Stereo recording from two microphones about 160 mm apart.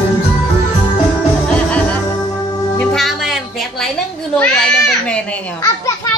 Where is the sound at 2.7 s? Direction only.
Centre (ahead or behind).